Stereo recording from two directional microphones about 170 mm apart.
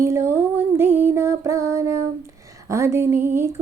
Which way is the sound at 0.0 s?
15° right (ahead or behind).